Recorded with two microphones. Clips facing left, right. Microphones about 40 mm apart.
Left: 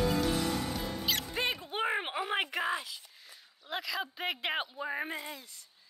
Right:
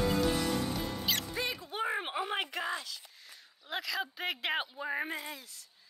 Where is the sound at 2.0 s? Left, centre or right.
Centre.